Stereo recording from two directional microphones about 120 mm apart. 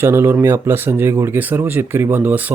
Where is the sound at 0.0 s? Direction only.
20° right (ahead or behind).